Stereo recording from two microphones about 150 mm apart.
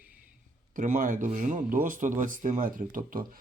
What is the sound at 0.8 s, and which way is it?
Speech, 60° right (ahead or behind).